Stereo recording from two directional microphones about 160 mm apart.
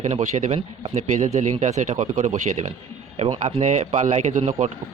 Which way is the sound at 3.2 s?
35° right (ahead or behind).